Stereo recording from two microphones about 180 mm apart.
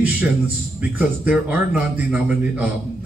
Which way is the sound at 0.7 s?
10° right (ahead or behind).